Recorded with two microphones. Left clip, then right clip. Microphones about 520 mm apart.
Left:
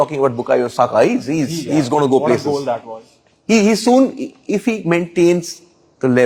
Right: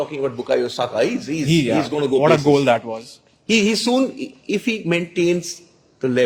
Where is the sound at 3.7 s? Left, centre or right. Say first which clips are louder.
Left 6 dB; centre.